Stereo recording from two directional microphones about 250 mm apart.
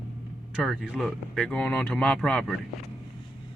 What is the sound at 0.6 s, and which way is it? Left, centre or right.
Speech, centre.